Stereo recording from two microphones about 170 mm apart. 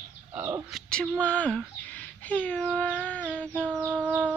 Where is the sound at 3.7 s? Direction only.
10° right (ahead or behind).